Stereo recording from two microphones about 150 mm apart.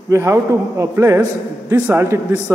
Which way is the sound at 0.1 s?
20° right (ahead or behind).